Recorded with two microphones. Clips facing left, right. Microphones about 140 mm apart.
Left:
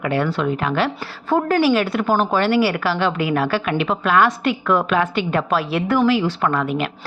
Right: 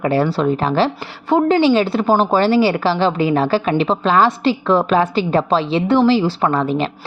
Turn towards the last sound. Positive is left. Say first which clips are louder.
# right 3 dB
turn(degrees=-30)  # may be behind; listen again after turning